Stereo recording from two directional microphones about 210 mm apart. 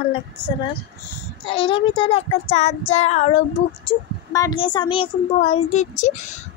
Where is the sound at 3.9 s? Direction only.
20° left (ahead or behind).